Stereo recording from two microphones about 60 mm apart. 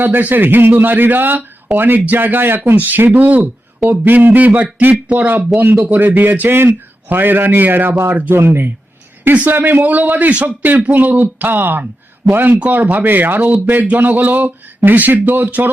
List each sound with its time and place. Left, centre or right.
0.0 s a man's voice: right
8.1 s a man's voice: right
8.4 s a man's voice: right
9.2 s a man's voice: right